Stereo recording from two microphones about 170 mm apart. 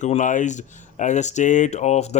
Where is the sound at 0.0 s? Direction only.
45° left (ahead or behind).